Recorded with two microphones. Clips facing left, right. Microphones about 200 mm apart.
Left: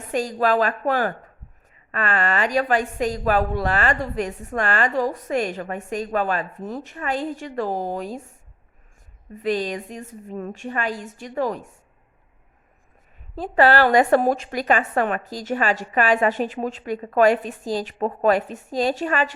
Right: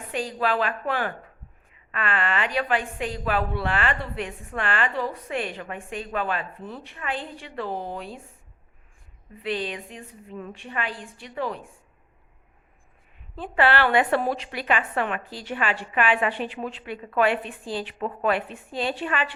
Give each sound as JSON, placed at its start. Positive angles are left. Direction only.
{"t": 0.1, "sound": "a woman's voice", "side_deg": 45}
{"t": 9.3, "sound": "a woman's voice", "side_deg": 45}
{"t": 13.3, "sound": "a woman's voice", "side_deg": 40}